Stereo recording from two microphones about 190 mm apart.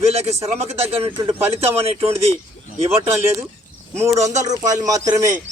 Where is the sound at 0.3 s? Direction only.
15° right (ahead or behind).